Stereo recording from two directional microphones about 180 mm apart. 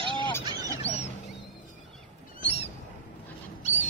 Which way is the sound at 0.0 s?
25° right (ahead or behind).